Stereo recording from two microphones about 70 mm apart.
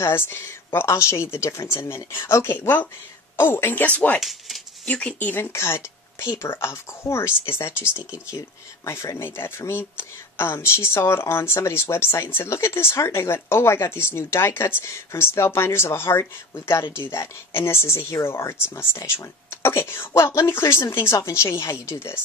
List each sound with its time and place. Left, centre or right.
0.0 s speech: left
0.8 s speech: left
4.2 s speech: centre
4.8 s speech: left
5.3 s speech: left
8.8 s speech: left